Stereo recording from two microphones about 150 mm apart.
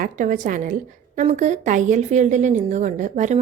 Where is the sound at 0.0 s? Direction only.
55° right (ahead or behind).